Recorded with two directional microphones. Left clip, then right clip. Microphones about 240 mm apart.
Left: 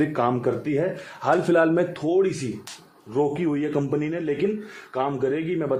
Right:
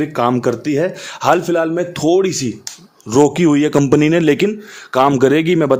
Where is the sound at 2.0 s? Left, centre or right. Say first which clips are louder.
Right 8 dB; right.